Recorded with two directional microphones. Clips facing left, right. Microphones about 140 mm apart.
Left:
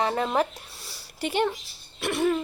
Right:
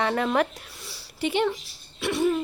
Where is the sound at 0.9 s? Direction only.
45° left (ahead or behind).